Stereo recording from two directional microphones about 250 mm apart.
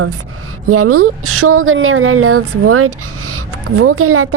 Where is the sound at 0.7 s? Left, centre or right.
Right.